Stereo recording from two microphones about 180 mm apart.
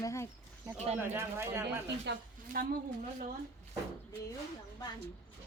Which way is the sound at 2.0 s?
55° right (ahead or behind).